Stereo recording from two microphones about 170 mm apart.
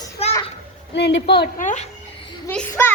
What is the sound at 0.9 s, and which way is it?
Speech, 85° left.